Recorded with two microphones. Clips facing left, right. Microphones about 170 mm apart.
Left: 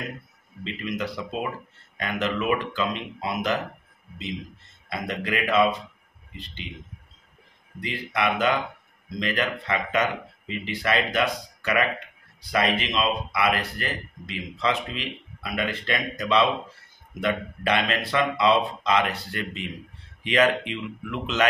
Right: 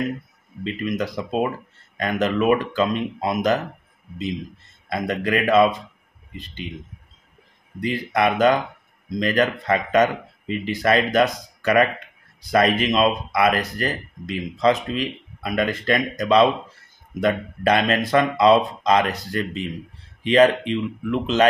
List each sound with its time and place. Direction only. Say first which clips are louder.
0.9 s speech: right 6 dB; 45° right (ahead or behind)
4.8 s speech: right 6 dB; 45° right (ahead or behind)
7.8 s speech: right 6 dB; 45° right (ahead or behind)